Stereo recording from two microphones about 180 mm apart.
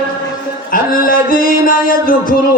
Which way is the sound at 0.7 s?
50° left (ahead or behind).